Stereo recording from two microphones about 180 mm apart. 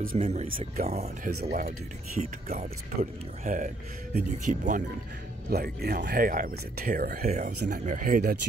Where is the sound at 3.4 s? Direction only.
45° right (ahead or behind).